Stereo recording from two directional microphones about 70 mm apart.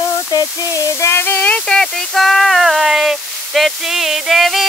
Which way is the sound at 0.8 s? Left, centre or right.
Left.